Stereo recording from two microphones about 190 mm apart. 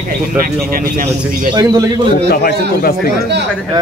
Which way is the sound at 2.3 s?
55° left (ahead or behind).